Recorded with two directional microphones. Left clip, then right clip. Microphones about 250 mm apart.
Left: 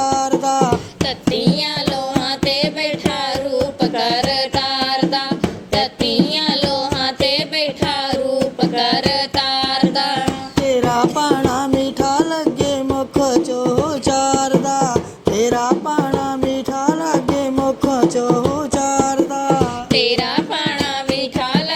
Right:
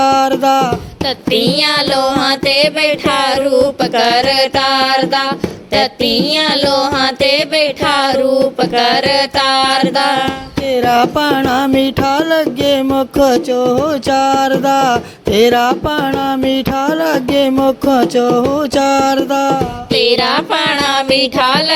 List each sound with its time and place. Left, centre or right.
0.0 s music: right